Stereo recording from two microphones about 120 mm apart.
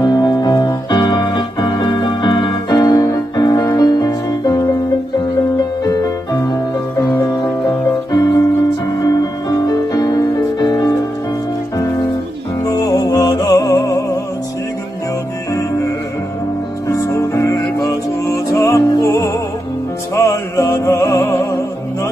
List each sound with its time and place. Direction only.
0.0 s keyboard: 35° left (ahead or behind)
7.0 s music: 25° left (ahead or behind)
8.1 s keyboard: 30° left (ahead or behind)
9.0 s music: 30° left (ahead or behind)
12.6 s music: 30° left (ahead or behind)
15.5 s music: 25° left (ahead or behind)
16.9 s music: 25° left (ahead or behind)